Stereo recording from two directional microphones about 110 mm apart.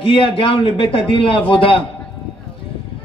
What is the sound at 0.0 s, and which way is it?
Speech, 55° left (ahead or behind).